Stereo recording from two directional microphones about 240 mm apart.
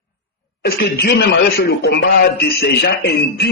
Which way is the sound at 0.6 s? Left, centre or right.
Left.